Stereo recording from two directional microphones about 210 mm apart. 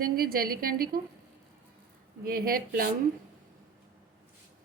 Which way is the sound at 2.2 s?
45° right (ahead or behind).